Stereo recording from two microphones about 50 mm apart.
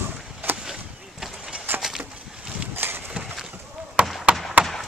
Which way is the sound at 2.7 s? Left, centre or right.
Right.